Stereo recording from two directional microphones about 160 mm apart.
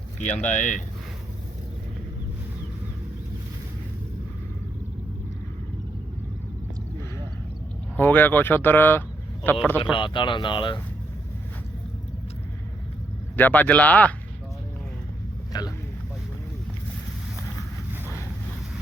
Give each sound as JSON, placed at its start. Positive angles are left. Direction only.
{"t": 0.2, "sound": "speech", "side_deg": 50}
{"t": 7.9, "sound": "speech", "side_deg": 10}
{"t": 9.9, "sound": "speech", "side_deg": 30}
{"t": 13.3, "sound": "speech", "side_deg": 10}
{"t": 15.5, "sound": "speech", "side_deg": 25}